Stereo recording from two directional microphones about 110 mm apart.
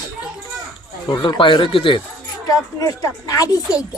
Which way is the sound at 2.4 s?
35° left (ahead or behind).